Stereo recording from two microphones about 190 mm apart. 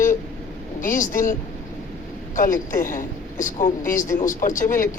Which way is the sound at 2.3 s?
45° left (ahead or behind).